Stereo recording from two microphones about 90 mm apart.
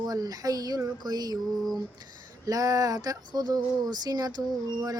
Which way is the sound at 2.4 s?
40° right (ahead or behind).